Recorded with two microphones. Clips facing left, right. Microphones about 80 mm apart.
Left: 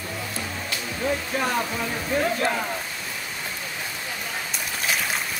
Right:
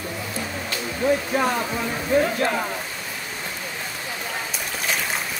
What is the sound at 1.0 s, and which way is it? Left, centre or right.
Speech, centre.